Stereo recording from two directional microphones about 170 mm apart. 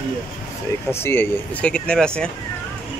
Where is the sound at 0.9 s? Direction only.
15° left (ahead or behind).